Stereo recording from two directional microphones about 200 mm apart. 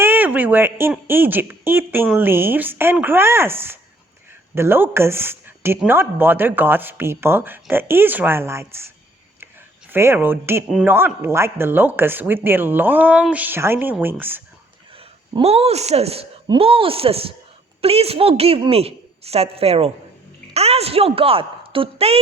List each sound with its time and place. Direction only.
0.0 s speech: 10° right (ahead or behind)
9.9 s speech: 10° right (ahead or behind)
14.9 s a woman's voice: 30° right (ahead or behind)